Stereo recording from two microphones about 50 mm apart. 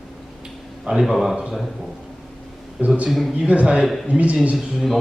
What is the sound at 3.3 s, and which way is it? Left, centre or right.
Speech, right.